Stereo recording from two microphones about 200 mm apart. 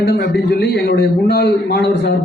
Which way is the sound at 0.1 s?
55° left (ahead or behind).